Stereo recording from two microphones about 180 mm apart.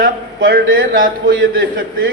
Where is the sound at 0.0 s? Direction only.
55° right (ahead or behind).